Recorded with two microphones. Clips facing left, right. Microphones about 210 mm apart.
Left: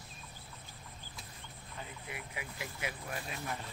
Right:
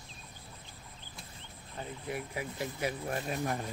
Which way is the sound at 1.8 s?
40° right (ahead or behind).